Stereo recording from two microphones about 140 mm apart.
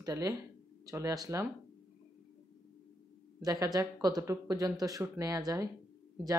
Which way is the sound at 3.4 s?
25° right (ahead or behind).